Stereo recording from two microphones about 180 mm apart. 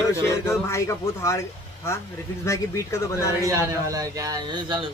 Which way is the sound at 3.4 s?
15° right (ahead or behind).